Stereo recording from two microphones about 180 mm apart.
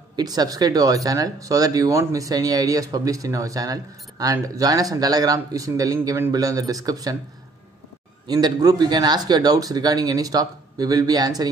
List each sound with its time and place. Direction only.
0.1 s speech: 20° right (ahead or behind)
8.3 s speech: 20° right (ahead or behind)